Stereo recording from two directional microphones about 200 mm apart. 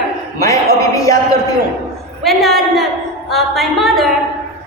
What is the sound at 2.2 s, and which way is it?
A woman's voice, centre (ahead or behind).